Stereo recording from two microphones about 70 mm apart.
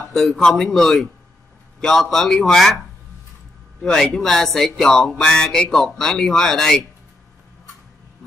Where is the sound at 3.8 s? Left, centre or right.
Centre.